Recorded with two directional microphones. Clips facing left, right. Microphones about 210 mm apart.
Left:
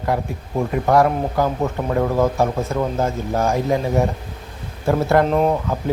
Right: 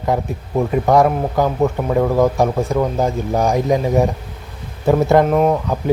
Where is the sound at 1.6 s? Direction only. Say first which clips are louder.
Right 4 dB; 5° right (ahead or behind).